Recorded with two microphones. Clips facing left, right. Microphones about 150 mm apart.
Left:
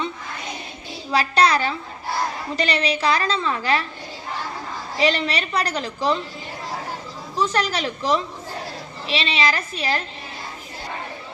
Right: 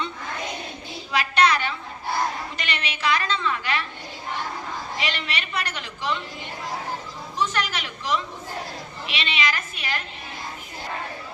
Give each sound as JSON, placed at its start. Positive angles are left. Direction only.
{"t": 1.1, "sound": "a woman's voice", "side_deg": 35}
{"t": 4.9, "sound": "a woman's voice", "side_deg": 35}
{"t": 7.3, "sound": "a woman's voice", "side_deg": 35}